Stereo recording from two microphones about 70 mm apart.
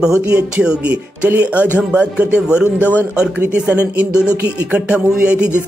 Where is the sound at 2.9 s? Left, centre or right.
Left.